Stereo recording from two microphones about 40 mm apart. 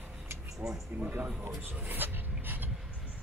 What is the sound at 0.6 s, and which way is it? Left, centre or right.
Speech, right.